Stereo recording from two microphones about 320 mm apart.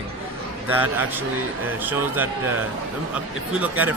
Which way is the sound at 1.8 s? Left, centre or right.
Centre.